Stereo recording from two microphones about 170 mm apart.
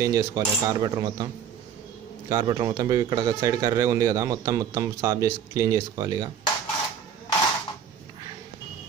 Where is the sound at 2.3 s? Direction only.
20° right (ahead or behind).